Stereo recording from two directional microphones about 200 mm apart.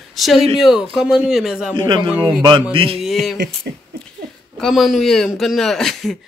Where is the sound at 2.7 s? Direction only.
25° right (ahead or behind).